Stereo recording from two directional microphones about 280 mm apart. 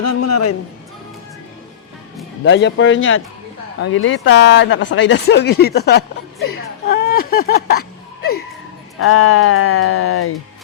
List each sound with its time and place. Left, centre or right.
0.0 s a man's voice: left
2.4 s speech: left
8.2 s a sound: left
9.0 s speech: left